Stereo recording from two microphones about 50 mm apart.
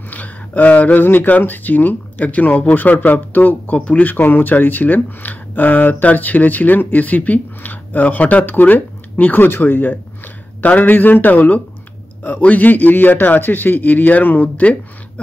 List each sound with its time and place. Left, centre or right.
0.1 s speech: left